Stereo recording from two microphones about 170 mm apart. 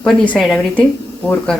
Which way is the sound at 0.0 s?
5° left (ahead or behind).